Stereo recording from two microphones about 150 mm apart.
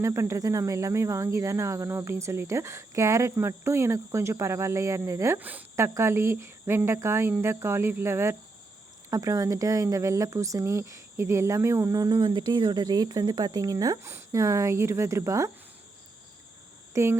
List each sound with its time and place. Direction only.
0.0 s speech: 20° right (ahead or behind)
16.9 s speech: 15° right (ahead or behind)